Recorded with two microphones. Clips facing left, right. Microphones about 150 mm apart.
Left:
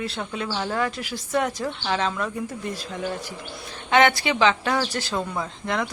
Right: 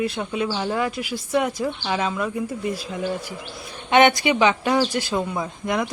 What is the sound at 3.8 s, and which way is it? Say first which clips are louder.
Speech: right 3 dB; 20° right (ahead or behind).